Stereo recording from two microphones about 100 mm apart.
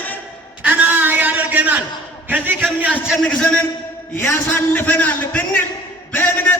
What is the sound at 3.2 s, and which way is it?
Speech, 10° left (ahead or behind).